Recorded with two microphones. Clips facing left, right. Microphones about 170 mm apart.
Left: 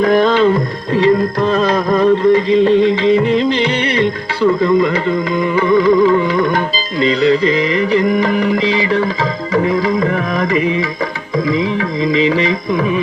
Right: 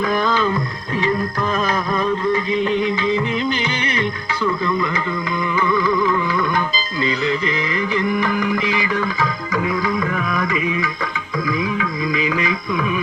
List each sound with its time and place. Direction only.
0.0 s music: 30° left (ahead or behind)
7.9 s music: 30° left (ahead or behind)
10.0 s carnatic music: 35° left (ahead or behind)
11.4 s music: 30° left (ahead or behind)